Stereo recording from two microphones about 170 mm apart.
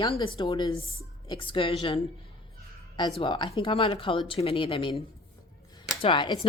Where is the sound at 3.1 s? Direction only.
30° left (ahead or behind).